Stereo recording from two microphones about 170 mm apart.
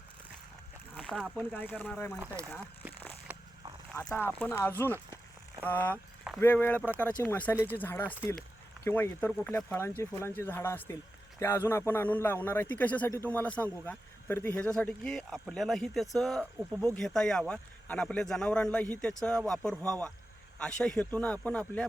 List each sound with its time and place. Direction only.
0.9 s a man's voice: 5° left (ahead or behind)
2.1 s speech: 15° right (ahead or behind)
3.3 s a sound: 10° right (ahead or behind)
3.9 s a man's voice: 15° left (ahead or behind)